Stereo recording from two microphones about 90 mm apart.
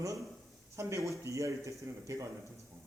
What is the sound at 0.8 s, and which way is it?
A man's voice, 35° right (ahead or behind).